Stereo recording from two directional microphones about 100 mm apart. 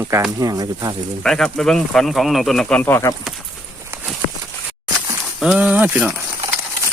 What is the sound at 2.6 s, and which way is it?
Speech, 15° left (ahead or behind).